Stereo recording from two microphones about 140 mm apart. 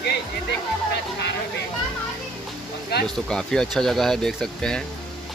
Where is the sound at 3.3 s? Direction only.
5° left (ahead or behind).